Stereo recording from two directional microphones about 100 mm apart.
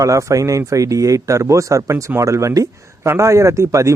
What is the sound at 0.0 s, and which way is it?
Speech, 30° right (ahead or behind).